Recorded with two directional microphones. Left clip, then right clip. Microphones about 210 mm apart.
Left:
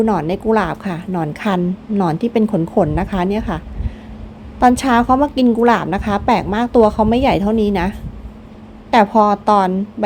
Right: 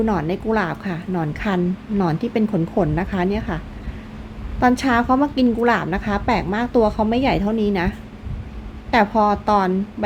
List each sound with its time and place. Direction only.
0.0 s a woman's voice: 15° left (ahead or behind)
4.6 s a woman's voice: 15° left (ahead or behind)